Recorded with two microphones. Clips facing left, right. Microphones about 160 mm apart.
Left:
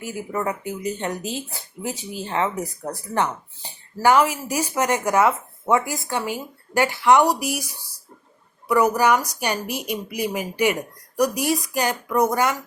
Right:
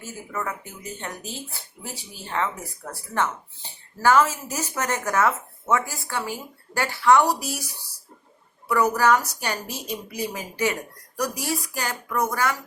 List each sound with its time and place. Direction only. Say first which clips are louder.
0.0 s speech: left 6 dB; 15° left (ahead or behind)